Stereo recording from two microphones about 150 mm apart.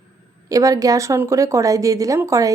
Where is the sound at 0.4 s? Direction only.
25° right (ahead or behind).